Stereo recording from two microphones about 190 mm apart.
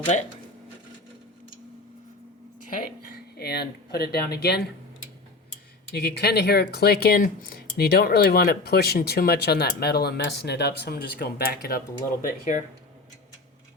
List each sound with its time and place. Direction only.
3.3 s speech: 55° left (ahead or behind)
5.9 s speech: 60° left (ahead or behind)